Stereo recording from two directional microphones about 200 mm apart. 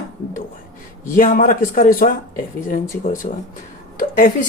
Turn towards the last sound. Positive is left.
turn(degrees=40)  # may be behind; listen again after turning